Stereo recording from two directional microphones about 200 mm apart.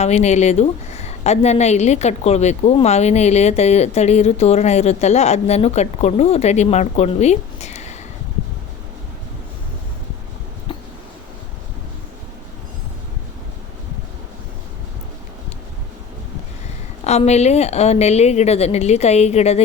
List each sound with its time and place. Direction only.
0.0 s a woman's voice: 35° left (ahead or behind)
17.0 s a woman's voice: 35° left (ahead or behind)